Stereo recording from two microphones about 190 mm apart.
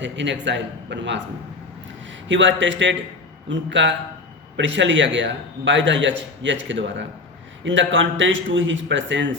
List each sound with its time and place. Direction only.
0.0 s a man's voice: 70° right (ahead or behind)